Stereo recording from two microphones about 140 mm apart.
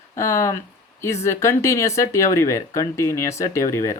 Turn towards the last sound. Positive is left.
turn(degrees=20)  # may be behind; listen again after turning